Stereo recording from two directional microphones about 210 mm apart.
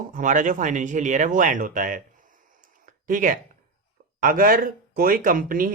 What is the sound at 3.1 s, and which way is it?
Speech, 40° right (ahead or behind).